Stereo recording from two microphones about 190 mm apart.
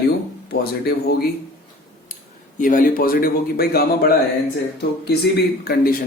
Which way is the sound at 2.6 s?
45° left (ahead or behind).